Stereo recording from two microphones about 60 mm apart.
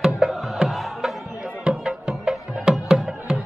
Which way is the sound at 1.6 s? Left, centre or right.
Centre.